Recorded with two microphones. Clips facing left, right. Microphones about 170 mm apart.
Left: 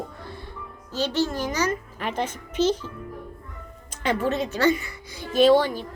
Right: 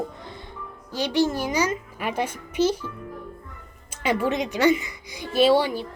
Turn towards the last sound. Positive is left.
turn(degrees=-10)  # may be behind; listen again after turning